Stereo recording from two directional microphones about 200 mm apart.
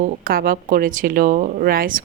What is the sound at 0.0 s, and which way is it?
A woman's voice, 45° right (ahead or behind).